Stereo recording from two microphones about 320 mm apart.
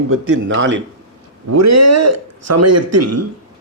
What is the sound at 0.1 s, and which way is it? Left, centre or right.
Speech, right.